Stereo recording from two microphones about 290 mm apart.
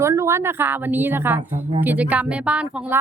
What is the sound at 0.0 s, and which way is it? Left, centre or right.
Speech, centre.